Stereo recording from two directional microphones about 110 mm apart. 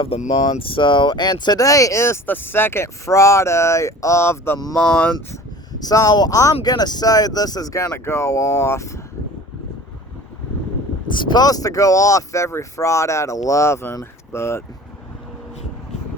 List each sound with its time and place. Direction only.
0.1 s speech: 55° left (ahead or behind); by 4.6 s 25° left (ahead or behind)
4.7 s speech: 10° left (ahead or behind)
5.8 s speech: 35° left (ahead or behind)
11.1 s speech: 45° left (ahead or behind); by 14.6 s 25° left (ahead or behind)